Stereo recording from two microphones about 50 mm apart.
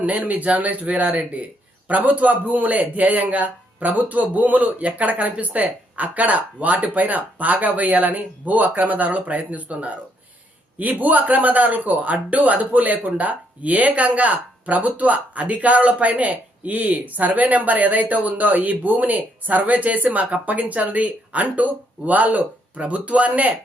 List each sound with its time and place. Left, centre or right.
0.3 s a man's voice: right